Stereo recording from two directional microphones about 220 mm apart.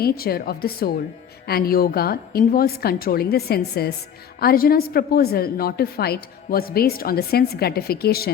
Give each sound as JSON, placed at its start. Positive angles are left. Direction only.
{"t": 0.0, "sound": "a woman's voice", "side_deg": 45}